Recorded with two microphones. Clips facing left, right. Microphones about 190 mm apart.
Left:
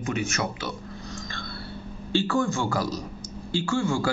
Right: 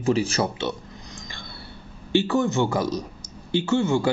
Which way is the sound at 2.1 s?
20° right (ahead or behind).